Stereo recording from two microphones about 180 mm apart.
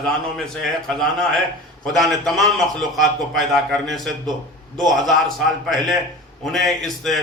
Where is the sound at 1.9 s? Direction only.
Centre (ahead or behind).